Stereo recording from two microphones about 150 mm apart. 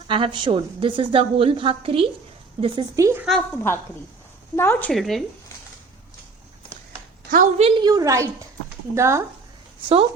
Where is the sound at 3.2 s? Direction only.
5° left (ahead or behind).